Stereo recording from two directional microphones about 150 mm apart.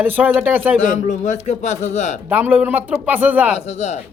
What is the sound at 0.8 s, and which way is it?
A man's voice, 55° left (ahead or behind).